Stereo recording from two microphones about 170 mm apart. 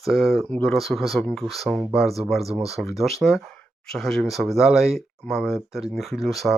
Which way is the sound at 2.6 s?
35° right (ahead or behind).